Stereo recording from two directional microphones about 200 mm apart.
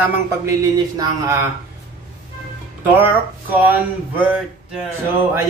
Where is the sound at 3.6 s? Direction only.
10° right (ahead or behind).